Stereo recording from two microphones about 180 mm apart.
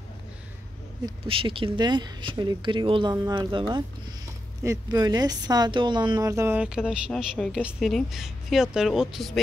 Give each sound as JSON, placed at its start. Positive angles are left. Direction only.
{"t": 1.0, "sound": "speech", "side_deg": -30}